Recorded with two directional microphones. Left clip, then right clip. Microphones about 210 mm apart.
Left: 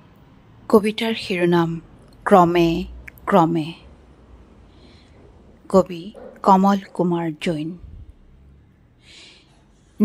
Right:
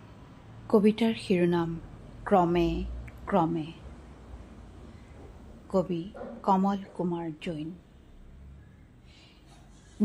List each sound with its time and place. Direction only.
0.7 s a woman's voice: 30° left (ahead or behind)
5.7 s a woman's voice: 35° left (ahead or behind)
9.1 s a sound: 35° left (ahead or behind)